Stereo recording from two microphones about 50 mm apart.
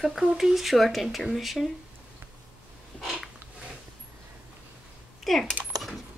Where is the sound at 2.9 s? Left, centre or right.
Left.